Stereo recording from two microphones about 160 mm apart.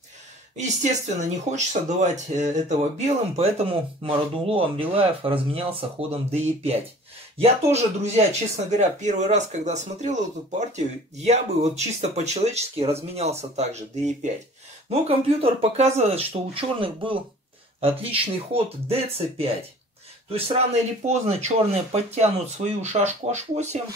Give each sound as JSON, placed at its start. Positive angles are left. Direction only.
{"t": 0.6, "sound": "speech", "side_deg": -50}